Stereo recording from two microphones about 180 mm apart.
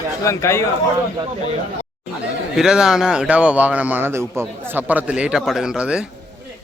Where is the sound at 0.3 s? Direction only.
15° left (ahead or behind).